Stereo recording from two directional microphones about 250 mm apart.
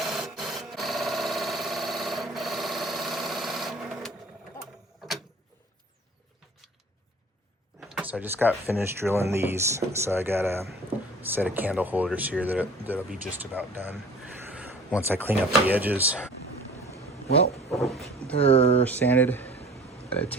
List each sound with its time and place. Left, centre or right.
0.0 s printer: centre
7.9 s speech: centre
17.7 s speech: centre
18.3 s speech: left
18.9 s speech: centre
20.1 s rain: centre